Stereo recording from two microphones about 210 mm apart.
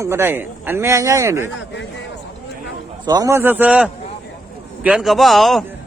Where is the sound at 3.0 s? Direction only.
20° right (ahead or behind).